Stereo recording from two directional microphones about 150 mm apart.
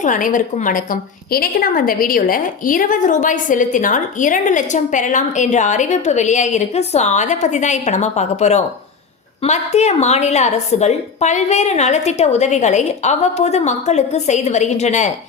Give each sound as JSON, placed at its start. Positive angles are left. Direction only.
{"t": 0.0, "sound": "a woman's voice", "side_deg": 60}